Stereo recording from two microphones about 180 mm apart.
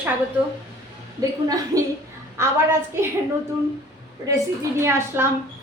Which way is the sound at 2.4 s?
15° right (ahead or behind).